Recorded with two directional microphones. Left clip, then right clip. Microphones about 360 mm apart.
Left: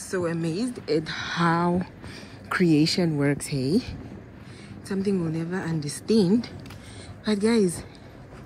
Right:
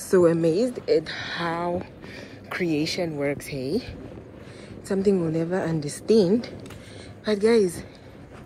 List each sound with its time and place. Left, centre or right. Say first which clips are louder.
0.1 s a woman's voice: right 9 dB; centre
4.9 s a woman's voice: right 5 dB; centre
6.0 s speech: right 3 dB; centre